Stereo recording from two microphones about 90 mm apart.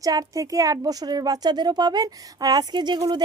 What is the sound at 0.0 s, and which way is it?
A woman's voice, 40° right (ahead or behind).